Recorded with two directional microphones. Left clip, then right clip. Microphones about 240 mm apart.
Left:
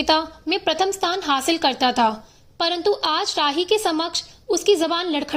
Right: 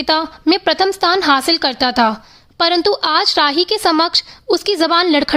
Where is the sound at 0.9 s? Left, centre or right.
Right.